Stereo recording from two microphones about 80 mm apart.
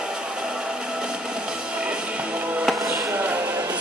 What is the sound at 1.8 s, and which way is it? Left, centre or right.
Music, centre.